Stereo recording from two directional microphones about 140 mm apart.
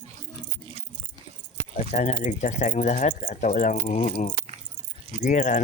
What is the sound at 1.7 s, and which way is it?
Speech, 55° left (ahead or behind).